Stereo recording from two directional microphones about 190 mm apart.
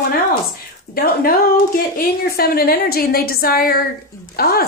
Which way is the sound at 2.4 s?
50° left (ahead or behind).